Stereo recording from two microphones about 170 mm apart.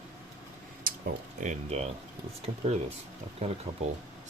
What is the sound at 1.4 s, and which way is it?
Speech, 40° right (ahead or behind).